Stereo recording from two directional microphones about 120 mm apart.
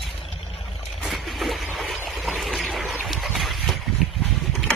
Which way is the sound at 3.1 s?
Centre (ahead or behind).